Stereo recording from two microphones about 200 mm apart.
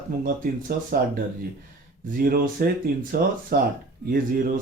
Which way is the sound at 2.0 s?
45° right (ahead or behind).